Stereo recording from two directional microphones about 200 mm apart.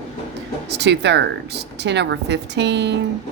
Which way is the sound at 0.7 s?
60° right (ahead or behind).